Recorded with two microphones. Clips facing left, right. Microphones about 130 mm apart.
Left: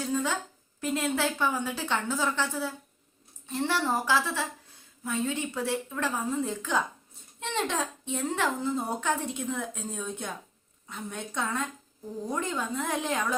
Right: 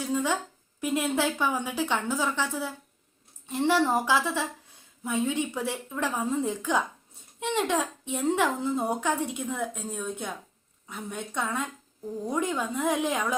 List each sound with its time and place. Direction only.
0.0 s a woman's voice: 15° right (ahead or behind)